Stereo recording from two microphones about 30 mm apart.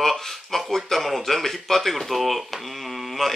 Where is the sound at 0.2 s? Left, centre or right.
Centre.